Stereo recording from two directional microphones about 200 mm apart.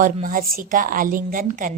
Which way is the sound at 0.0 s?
40° right (ahead or behind).